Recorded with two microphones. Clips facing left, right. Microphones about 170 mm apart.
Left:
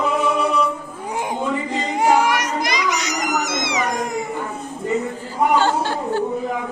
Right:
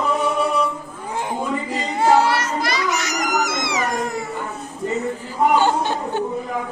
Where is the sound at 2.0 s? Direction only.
15° left (ahead or behind).